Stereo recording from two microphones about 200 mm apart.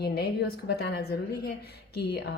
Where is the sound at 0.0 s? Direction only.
55° left (ahead or behind).